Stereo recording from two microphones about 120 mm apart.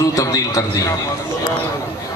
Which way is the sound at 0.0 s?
25° left (ahead or behind).